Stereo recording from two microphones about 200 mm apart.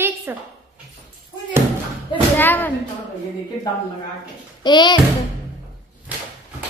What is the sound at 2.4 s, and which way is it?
Speech, 10° left (ahead or behind).